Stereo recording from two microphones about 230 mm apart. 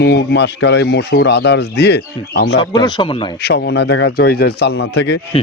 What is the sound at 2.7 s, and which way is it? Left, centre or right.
Speech, centre.